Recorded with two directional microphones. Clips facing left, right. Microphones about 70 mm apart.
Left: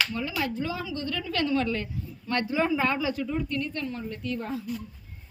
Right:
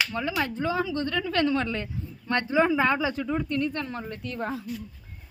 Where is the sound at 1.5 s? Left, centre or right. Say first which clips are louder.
Left 1 dB; centre.